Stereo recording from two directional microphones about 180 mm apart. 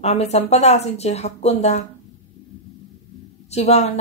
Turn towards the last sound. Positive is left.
turn(degrees=35)  # may be behind; listen again after turning